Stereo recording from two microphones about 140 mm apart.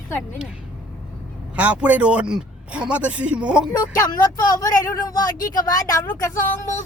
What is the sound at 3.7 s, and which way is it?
Speech, 25° left (ahead or behind).